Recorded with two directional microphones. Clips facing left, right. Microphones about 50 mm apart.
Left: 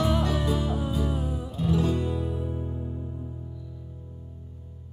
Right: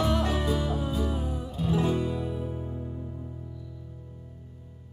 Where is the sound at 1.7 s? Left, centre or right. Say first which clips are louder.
Right 1 dB; right.